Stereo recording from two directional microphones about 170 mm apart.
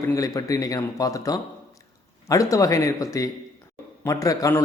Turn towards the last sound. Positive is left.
turn(degrees=20)  # may be behind; listen again after turning